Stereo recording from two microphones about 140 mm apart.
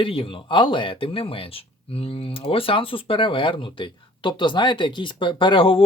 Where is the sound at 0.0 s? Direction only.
40° left (ahead or behind).